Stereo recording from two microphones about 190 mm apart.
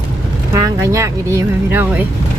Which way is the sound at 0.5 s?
15° right (ahead or behind).